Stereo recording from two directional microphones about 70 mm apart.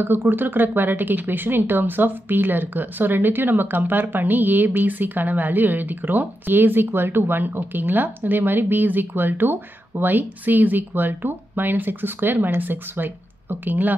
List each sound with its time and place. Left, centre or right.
0.0 s speech: right